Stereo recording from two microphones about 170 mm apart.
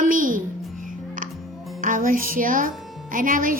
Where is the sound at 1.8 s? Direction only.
50° right (ahead or behind).